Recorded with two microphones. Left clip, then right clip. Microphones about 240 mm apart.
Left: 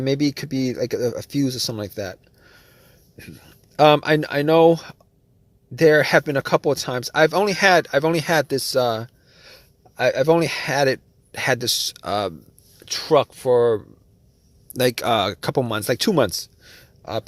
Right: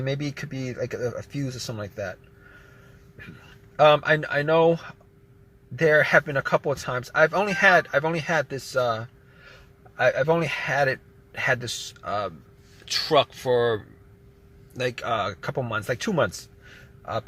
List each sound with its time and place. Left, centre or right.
0.0 s speech: left
3.8 s speech: left
12.8 s speech: left
14.7 s speech: left